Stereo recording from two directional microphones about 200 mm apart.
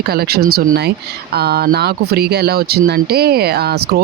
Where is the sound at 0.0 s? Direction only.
50° right (ahead or behind).